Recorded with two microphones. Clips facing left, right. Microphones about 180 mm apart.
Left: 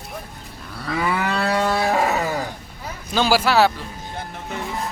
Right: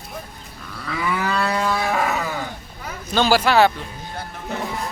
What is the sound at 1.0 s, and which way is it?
Livestock, 30° left (ahead or behind).